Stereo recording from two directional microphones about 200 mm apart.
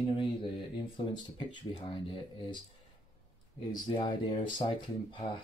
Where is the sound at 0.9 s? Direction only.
25° left (ahead or behind).